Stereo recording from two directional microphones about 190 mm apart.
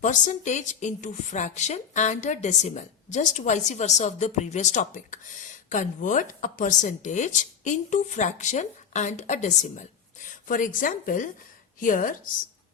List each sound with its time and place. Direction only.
0.0 s a woman's voice: 40° left (ahead or behind)